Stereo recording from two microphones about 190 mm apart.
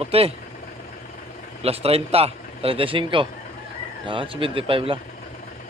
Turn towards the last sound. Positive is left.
turn(degrees=-30)  # may be behind; listen again after turning